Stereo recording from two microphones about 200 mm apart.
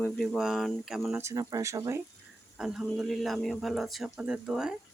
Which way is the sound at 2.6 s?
5° right (ahead or behind).